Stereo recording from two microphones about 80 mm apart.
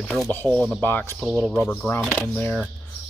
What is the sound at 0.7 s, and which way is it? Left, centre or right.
Speech, left.